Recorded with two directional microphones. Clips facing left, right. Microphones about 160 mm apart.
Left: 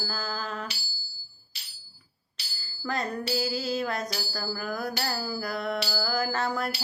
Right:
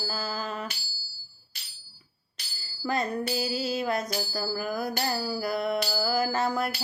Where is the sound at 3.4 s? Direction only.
10° right (ahead or behind).